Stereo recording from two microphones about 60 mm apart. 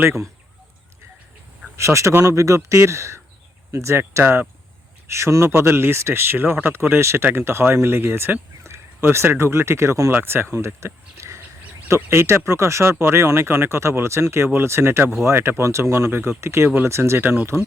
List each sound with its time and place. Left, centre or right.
1.7 s speech: right
10.1 s speech: right